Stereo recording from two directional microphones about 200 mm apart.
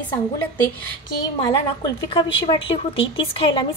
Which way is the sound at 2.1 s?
25° left (ahead or behind).